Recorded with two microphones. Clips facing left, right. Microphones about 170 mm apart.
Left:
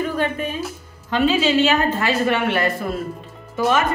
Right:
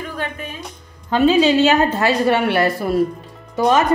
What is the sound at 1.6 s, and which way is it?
A woman's voice, 40° right (ahead or behind).